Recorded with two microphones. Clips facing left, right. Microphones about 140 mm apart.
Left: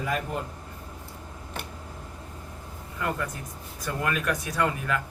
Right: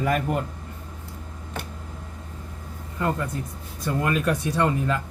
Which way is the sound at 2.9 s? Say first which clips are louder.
Right 4 dB; 25° right (ahead or behind).